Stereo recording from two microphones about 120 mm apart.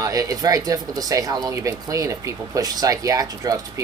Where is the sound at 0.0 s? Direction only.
30° right (ahead or behind).